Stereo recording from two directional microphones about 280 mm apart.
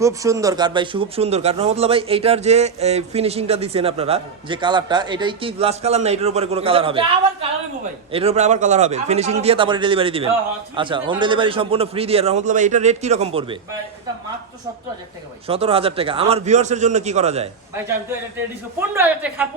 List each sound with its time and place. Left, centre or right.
0.0 s a man's voice: centre
8.1 s a man's voice: right
15.4 s a man's voice: right
18.8 s speech: centre